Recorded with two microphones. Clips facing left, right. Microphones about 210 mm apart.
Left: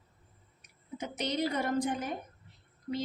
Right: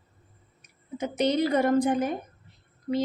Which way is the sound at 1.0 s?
60° right (ahead or behind).